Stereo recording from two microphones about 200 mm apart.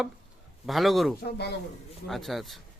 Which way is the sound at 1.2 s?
55° left (ahead or behind).